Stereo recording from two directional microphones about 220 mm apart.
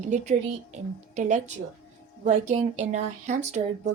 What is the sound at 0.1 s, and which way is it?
Speech, 30° right (ahead or behind).